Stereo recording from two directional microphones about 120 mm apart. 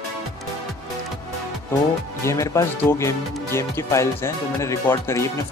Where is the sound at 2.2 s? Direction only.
25° left (ahead or behind).